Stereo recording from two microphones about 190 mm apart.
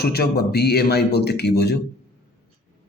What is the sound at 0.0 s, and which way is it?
Speech, 55° left (ahead or behind).